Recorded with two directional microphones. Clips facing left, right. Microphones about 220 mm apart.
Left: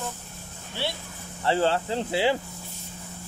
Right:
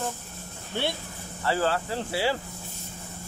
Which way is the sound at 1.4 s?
25° left (ahead or behind).